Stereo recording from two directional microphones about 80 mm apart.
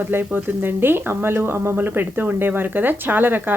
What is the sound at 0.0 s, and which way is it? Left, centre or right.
Speech, right.